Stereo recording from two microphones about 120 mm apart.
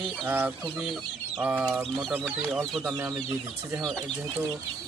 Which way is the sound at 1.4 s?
10° right (ahead or behind).